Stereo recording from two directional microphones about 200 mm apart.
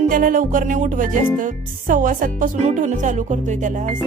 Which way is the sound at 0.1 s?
40° right (ahead or behind).